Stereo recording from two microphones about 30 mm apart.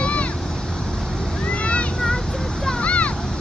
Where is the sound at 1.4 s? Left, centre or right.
Left.